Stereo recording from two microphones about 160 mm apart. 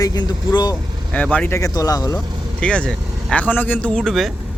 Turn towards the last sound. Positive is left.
turn(degrees=0)  # may be behind; listen again after turning